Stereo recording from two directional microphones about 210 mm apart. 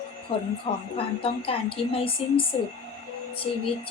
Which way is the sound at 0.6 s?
25° left (ahead or behind).